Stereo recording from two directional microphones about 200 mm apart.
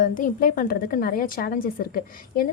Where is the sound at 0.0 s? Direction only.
40° left (ahead or behind).